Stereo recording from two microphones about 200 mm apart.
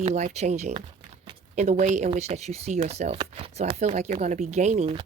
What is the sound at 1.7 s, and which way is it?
Speech, 35° right (ahead or behind).